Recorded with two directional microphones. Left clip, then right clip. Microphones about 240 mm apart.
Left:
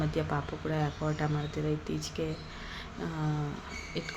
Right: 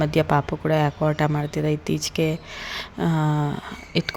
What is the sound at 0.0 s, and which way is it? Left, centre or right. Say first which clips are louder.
Speech: right 12 dB; right.